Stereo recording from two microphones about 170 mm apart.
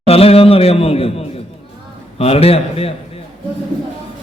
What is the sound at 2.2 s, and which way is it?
Speech, 35° left (ahead or behind).